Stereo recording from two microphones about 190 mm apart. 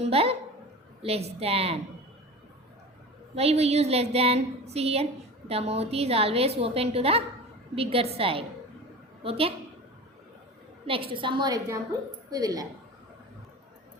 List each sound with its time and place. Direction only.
0.0 s a woman's voice: 30° right (ahead or behind)
3.3 s a woman's voice: 35° right (ahead or behind)
10.8 s a woman's voice: 30° right (ahead or behind)